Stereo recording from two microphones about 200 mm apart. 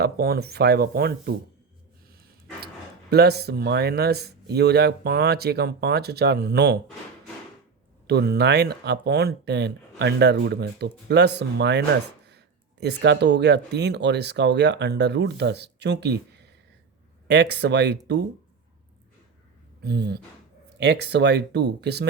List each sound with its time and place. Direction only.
0.0 s speech: 50° right (ahead or behind)
3.1 s speech: 55° right (ahead or behind)
8.0 s speech: 55° right (ahead or behind)
19.8 s speech: 55° right (ahead or behind)